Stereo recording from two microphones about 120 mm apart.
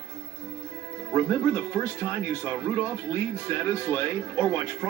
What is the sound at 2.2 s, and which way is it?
Speech, 30° right (ahead or behind).